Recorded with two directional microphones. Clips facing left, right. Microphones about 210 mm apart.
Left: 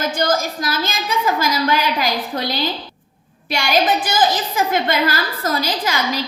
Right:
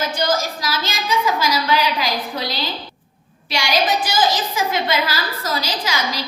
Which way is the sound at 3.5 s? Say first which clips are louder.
Left 2 dB; 50° left (ahead or behind).